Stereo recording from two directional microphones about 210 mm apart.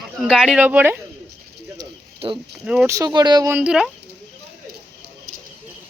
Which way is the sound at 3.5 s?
5° right (ahead or behind).